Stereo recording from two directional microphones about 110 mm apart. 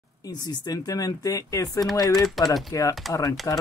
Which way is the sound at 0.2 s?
40° left (ahead or behind).